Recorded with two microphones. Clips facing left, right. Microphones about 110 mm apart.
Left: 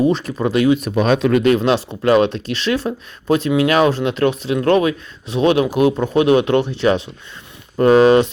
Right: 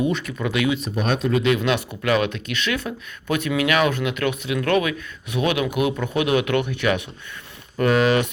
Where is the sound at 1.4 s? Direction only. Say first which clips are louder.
Left 6 dB; 35° left (ahead or behind).